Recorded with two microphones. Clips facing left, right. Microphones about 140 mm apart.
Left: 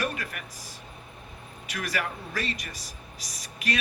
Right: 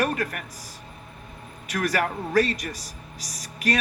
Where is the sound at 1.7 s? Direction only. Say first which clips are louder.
Right 7 dB; 45° right (ahead or behind).